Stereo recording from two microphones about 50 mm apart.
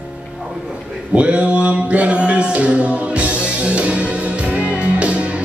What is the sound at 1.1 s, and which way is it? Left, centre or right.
Mantra, right.